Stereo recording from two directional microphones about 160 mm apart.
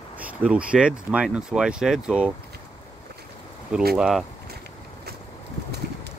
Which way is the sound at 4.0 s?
5° right (ahead or behind).